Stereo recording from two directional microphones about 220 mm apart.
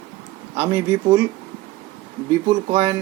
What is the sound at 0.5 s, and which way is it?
Speech, 10° right (ahead or behind).